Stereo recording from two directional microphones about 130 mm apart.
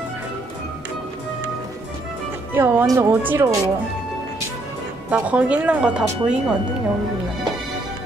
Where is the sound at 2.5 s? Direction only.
15° right (ahead or behind).